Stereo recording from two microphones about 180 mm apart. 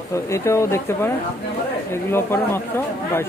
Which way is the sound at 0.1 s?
15° left (ahead or behind).